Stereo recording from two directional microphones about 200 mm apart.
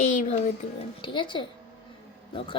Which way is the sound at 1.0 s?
25° left (ahead or behind).